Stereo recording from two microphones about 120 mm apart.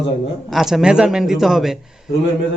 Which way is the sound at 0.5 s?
5° right (ahead or behind).